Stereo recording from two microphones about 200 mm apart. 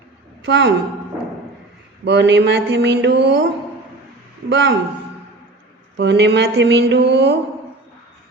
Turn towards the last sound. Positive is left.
turn(degrees=-55)  # may be behind; listen again after turning